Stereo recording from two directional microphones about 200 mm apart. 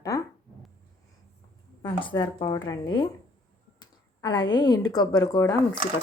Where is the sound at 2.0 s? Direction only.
25° left (ahead or behind).